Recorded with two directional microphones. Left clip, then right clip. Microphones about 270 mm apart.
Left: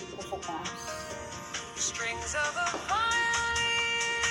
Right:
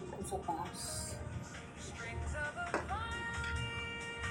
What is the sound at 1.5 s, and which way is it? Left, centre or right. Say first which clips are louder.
Music: left 14 dB; left.